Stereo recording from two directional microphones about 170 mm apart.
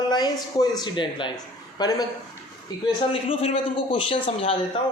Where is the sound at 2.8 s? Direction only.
35° left (ahead or behind).